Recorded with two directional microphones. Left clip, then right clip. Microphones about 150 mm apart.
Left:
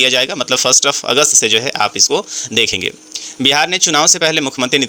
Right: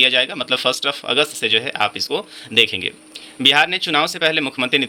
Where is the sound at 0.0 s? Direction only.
40° left (ahead or behind).